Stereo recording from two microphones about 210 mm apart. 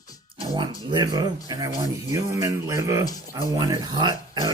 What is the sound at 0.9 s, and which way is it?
Speech, 20° right (ahead or behind).